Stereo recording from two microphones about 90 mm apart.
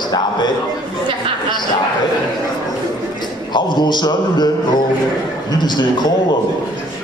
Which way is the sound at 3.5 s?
55° left (ahead or behind).